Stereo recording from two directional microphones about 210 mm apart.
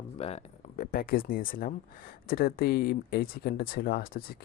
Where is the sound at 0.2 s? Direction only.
30° left (ahead or behind).